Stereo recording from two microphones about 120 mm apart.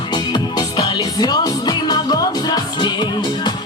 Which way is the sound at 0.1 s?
35° left (ahead or behind).